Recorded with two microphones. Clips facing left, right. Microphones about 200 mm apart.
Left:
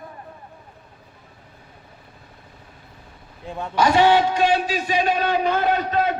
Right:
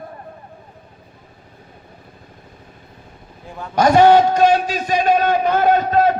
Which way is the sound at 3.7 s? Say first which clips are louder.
Right 5 dB; 45° right (ahead or behind).